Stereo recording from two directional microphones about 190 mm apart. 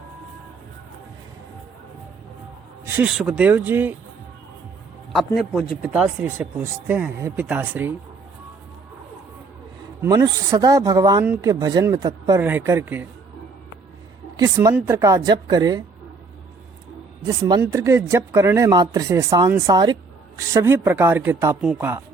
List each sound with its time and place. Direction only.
2.8 s speech: 10° right (ahead or behind)
5.1 s speech: centre (ahead or behind)
10.0 s speech: 15° right (ahead or behind)
14.3 s a woman's voice: 20° right (ahead or behind)
17.2 s speech: 15° right (ahead or behind)